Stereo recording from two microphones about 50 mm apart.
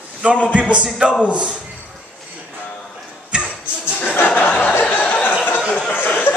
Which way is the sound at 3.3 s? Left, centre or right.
Centre.